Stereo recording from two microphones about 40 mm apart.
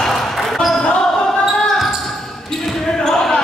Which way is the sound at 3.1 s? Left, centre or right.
Centre.